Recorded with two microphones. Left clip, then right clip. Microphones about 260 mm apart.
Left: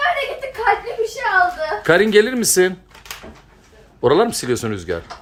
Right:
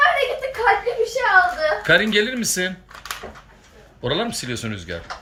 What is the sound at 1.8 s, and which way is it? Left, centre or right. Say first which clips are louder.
Speech: left 6 dB; centre.